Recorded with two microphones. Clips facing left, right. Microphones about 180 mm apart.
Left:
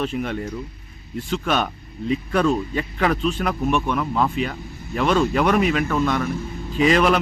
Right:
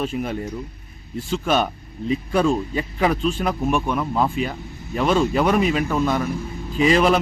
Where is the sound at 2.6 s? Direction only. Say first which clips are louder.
Right 1 dB; 20° right (ahead or behind).